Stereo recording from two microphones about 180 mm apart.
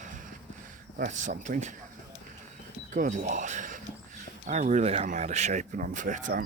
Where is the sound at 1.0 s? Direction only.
45° right (ahead or behind).